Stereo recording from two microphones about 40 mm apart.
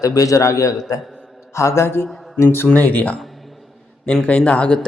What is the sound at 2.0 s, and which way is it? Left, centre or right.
Speech, left.